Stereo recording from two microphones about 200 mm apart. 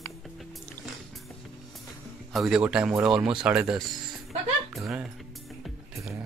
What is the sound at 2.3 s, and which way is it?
Speech, 5° right (ahead or behind).